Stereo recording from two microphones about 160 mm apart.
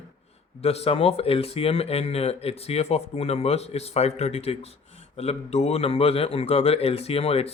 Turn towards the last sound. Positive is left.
turn(degrees=40)  # may be behind; listen again after turning